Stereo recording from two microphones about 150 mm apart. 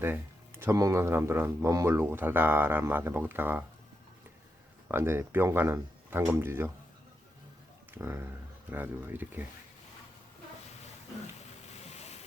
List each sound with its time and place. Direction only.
0.0 s speech: 15° right (ahead or behind)
4.9 s speech: 15° right (ahead or behind)
7.9 s speech: 15° right (ahead or behind)
11.7 s boat: 45° left (ahead or behind)